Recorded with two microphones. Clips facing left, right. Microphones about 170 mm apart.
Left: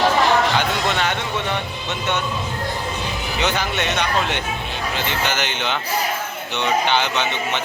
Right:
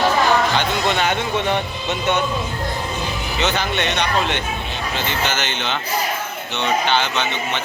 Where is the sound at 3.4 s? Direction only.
10° left (ahead or behind).